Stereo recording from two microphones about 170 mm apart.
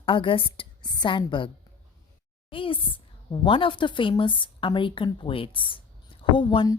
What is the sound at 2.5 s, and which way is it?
A woman's voice, 30° left (ahead or behind).